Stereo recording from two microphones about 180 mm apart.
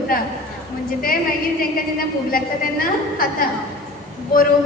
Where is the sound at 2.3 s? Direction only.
50° left (ahead or behind).